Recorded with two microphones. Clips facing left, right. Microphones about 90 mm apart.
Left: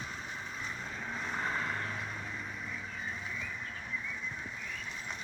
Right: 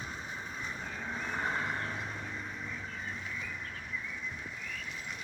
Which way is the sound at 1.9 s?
15° right (ahead or behind).